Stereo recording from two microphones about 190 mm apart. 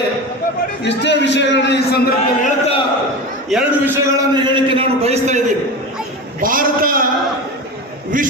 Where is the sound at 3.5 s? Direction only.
10° right (ahead or behind).